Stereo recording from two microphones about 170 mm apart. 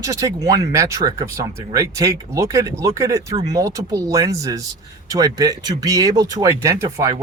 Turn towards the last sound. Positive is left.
turn(degrees=-15)  # may be behind; listen again after turning